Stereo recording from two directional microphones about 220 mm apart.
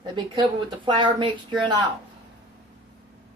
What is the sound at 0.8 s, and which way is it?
Speech, 20° right (ahead or behind).